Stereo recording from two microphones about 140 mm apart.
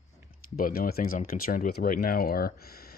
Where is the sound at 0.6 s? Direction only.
90° left.